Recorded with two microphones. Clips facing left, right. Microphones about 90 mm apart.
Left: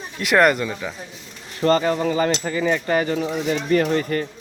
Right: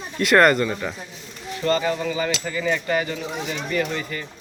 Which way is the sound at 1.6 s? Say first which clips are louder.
Left 4 dB; 40° left (ahead or behind).